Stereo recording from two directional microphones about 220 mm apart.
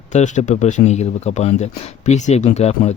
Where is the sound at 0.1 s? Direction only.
30° left (ahead or behind).